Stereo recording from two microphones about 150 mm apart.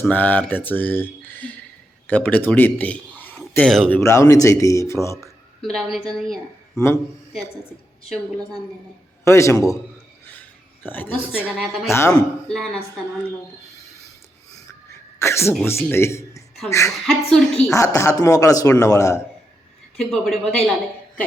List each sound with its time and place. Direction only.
0.0 s speech: 10° left (ahead or behind)
4.0 s speech: 20° left (ahead or behind)
5.6 s a woman's voice: centre (ahead or behind)
6.7 s speech: 20° left (ahead or behind)
9.2 s speech: 20° left (ahead or behind)
10.8 s speech: 10° left (ahead or behind)
11.4 s a woman's voice: centre (ahead or behind)
11.9 s speech: 20° left (ahead or behind)
12.1 s a woman's voice: 5° left (ahead or behind)
15.2 s speech: 20° left (ahead or behind)
17.1 s a woman's voice: 5° left (ahead or behind)
17.7 s speech: 20° left (ahead or behind)
20.1 s a woman's voice: centre (ahead or behind)